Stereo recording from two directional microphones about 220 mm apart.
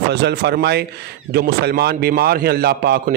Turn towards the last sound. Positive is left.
turn(degrees=-45)  # may be behind; listen again after turning